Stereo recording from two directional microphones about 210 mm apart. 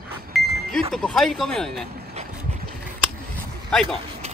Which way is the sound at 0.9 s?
Centre (ahead or behind).